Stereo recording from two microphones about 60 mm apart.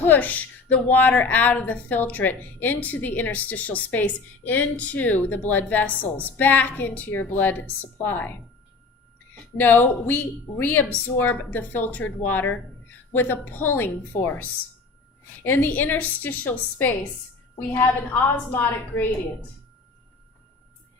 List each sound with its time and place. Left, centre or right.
0.0 s a woman's voice: left
9.6 s a woman's voice: left
18.1 s a woman's voice: left